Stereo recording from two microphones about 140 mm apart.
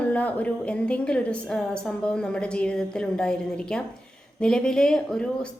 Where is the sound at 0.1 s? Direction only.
10° left (ahead or behind).